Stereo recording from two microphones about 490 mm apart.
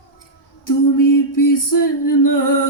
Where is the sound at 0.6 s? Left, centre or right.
Left.